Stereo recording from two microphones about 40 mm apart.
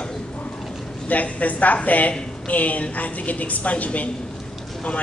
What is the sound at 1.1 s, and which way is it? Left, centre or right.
A man's voice, left.